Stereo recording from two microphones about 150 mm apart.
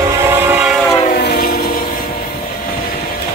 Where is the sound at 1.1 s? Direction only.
90° left.